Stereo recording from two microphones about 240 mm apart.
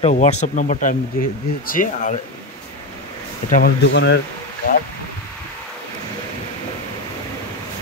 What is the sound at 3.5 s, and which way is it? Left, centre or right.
Speech, left.